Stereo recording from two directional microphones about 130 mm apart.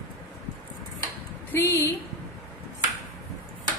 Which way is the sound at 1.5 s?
15° left (ahead or behind).